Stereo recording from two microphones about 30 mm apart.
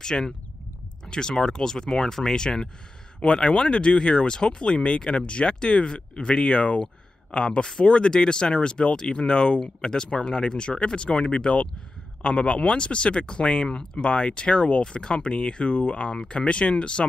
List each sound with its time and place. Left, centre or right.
0.0 s speech: left
1.3 s speech: left
2.3 s speech: left